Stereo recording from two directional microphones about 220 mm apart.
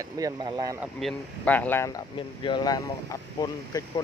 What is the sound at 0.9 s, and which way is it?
Speech, 5° left (ahead or behind).